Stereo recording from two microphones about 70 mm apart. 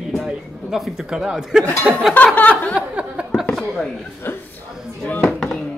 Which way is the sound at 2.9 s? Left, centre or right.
Centre.